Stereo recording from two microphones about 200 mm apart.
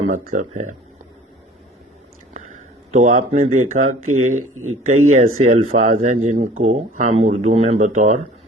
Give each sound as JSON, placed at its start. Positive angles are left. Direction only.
{"t": 0.1, "sound": "speech", "side_deg": -40}
{"t": 2.3, "sound": "a sound", "side_deg": -40}
{"t": 3.2, "sound": "speech", "side_deg": -35}
{"t": 3.8, "sound": "speech", "side_deg": -90}
{"t": 4.9, "sound": "speech", "side_deg": -35}